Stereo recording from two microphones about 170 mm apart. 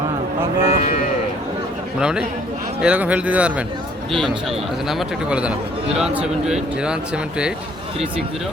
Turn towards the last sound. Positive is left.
turn(degrees=-5)  # may be behind; listen again after turning